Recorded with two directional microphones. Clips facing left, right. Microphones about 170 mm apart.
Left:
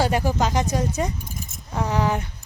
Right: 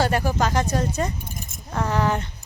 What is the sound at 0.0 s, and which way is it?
Speech, 15° left (ahead or behind).